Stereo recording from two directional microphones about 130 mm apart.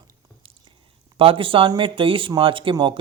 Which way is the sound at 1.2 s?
45° right (ahead or behind).